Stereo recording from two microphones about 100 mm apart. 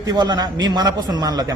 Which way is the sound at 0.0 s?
45° right (ahead or behind).